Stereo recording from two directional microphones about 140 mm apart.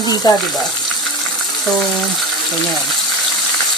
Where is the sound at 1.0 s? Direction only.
Centre (ahead or behind).